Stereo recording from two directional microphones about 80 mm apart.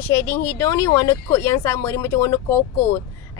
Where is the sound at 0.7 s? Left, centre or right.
Left.